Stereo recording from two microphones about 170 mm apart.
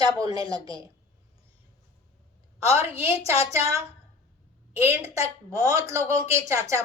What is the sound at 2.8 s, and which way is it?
Speech, 15° right (ahead or behind).